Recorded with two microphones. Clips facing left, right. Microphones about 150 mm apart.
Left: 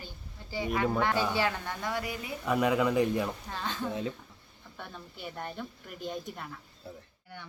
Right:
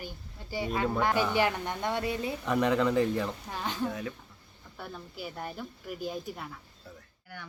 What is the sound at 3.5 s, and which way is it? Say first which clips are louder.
Speech: right 2 dB; 15° right (ahead or behind).